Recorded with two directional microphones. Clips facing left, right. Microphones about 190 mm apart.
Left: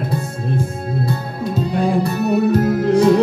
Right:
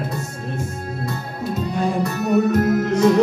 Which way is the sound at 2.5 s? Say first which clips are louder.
Left 3 dB; 30° left (ahead or behind).